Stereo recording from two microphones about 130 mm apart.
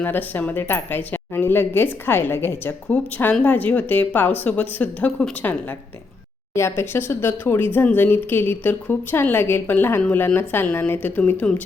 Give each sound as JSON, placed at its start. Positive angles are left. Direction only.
{"t": 0.0, "sound": "speech", "side_deg": 15}